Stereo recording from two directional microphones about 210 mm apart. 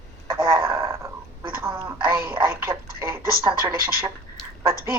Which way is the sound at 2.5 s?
10° right (ahead or behind).